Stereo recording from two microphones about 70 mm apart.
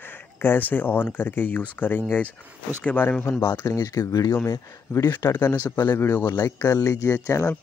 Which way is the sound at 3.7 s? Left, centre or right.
Left.